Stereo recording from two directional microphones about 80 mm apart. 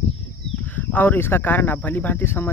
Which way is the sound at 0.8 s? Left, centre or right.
Left.